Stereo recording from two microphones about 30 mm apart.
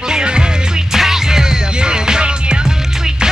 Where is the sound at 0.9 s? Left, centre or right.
Centre.